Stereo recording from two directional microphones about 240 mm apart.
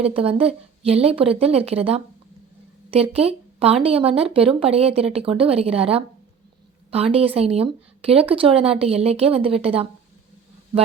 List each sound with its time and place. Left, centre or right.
0.0 s a woman's voice: right